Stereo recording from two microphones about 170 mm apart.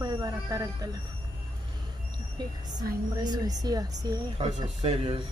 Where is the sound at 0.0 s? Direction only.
20° right (ahead or behind).